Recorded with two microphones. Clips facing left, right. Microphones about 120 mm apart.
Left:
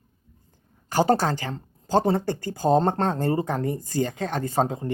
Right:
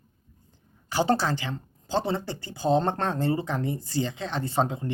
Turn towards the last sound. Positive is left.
turn(degrees=40)  # may be behind; listen again after turning